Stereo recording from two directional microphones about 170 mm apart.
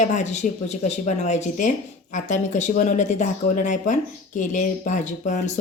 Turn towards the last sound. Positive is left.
turn(degrees=45)  # may be behind; listen again after turning